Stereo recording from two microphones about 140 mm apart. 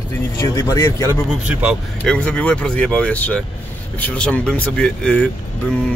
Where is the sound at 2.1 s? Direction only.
10° left (ahead or behind).